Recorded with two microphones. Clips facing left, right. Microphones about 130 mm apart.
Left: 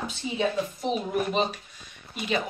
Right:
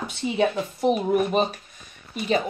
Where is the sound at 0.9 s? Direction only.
55° right (ahead or behind).